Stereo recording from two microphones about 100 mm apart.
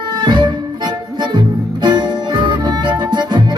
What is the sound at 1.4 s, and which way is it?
Music, 50° right (ahead or behind).